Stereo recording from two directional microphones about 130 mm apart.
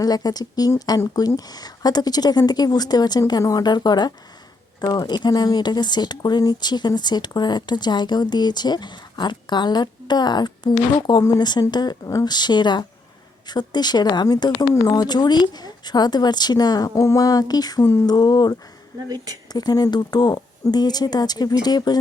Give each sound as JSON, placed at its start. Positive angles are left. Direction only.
{"t": 0.0, "sound": "speech", "side_deg": 30}
{"t": 19.0, "sound": "a woman's voice", "side_deg": -30}
{"t": 19.5, "sound": "speech", "side_deg": 30}